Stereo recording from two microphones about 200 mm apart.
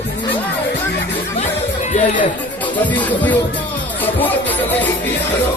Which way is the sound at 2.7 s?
10° left (ahead or behind).